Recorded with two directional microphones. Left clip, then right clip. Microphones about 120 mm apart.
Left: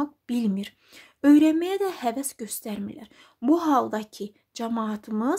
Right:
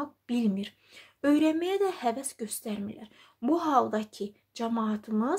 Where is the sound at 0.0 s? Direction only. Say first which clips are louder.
Left 3 dB; 45° left (ahead or behind).